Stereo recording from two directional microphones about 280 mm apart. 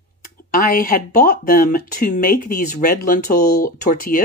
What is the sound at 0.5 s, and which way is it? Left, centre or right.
Speech, left.